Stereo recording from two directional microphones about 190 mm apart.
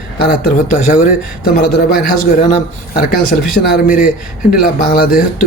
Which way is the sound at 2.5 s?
50° left (ahead or behind).